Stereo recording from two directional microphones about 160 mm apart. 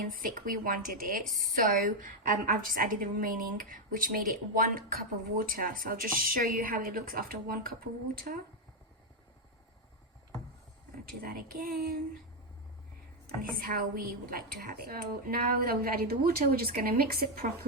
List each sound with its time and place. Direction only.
0.0 s a woman's voice: 60° right (ahead or behind)
11.2 s a woman's voice: 65° right (ahead or behind)
13.2 s a woman's voice: 65° right (ahead or behind)